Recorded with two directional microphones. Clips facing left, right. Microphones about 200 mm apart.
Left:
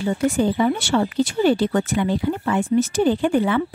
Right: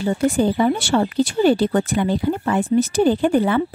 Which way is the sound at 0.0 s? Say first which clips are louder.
Right 2 dB; 35° right (ahead or behind).